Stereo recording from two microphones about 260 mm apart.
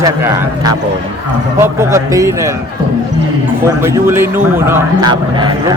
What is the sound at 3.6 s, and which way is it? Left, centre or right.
Speech, centre.